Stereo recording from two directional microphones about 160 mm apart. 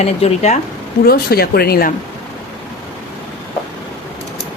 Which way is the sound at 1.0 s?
75° left (ahead or behind).